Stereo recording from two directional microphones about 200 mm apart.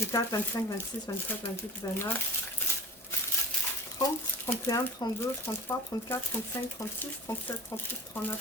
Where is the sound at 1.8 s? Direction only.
15° left (ahead or behind).